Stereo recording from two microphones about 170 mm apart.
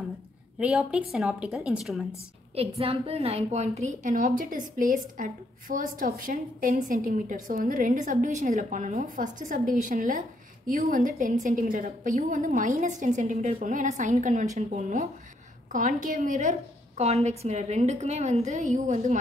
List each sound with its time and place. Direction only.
0.6 s a woman's voice: 5° right (ahead or behind)
2.8 s a woman's voice: 35° right (ahead or behind)